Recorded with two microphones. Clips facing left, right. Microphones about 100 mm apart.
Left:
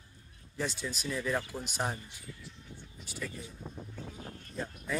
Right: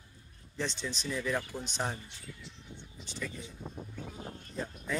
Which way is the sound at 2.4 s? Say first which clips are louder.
Even; 20° right (ahead or behind).